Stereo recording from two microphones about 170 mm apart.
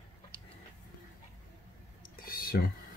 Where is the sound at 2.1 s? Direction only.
60° left (ahead or behind).